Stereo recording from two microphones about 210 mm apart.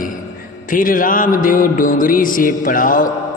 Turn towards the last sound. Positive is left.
turn(degrees=40)  # may be behind; listen again after turning